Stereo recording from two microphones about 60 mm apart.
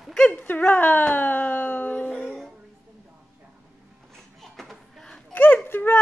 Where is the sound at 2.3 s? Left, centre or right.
Centre.